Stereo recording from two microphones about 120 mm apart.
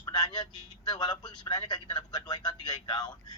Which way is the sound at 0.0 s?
40° left (ahead or behind).